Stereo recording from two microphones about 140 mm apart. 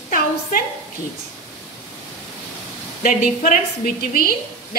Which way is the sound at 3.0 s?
75° left (ahead or behind).